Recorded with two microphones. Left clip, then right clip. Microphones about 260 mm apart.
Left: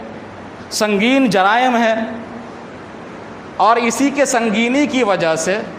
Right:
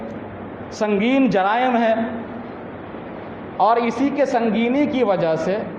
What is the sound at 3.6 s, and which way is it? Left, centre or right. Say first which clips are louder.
A man's voice: left 4 dB; left.